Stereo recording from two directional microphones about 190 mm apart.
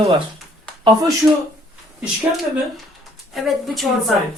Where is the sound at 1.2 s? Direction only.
15° right (ahead or behind).